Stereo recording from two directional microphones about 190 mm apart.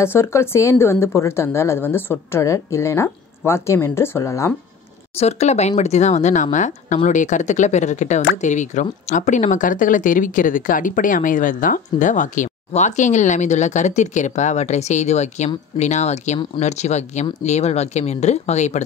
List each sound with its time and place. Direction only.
0.0 s a woman's voice: 15° left (ahead or behind)
5.1 s speech: 35° left (ahead or behind)